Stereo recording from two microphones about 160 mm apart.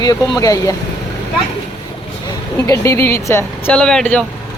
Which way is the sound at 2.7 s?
15° left (ahead or behind).